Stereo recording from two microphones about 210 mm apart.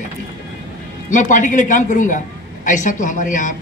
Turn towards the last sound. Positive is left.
turn(degrees=35)  # may be behind; listen again after turning